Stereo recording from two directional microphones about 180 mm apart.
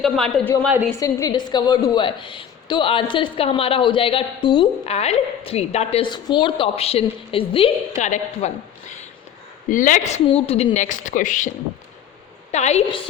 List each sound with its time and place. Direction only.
0.0 s a woman's voice: 5° left (ahead or behind)
0.9 s a woman's voice: 20° left (ahead or behind)
7.9 s a woman's voice: 40° left (ahead or behind)
10.2 s a woman's voice: 35° left (ahead or behind)